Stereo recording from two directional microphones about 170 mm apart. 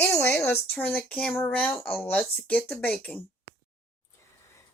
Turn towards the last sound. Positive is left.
turn(degrees=10)  # may be behind; listen again after turning